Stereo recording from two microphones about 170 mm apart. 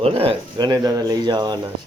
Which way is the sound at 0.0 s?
35° right (ahead or behind).